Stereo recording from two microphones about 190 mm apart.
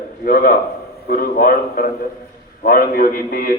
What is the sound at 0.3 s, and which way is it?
A man's voice, 50° left (ahead or behind).